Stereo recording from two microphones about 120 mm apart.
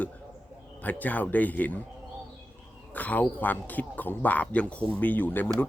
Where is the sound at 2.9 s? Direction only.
15° left (ahead or behind).